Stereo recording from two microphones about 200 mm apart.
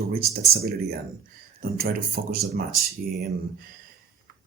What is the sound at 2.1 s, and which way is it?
Speech, 50° right (ahead or behind).